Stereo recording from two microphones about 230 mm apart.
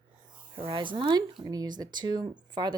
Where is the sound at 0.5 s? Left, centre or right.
Right.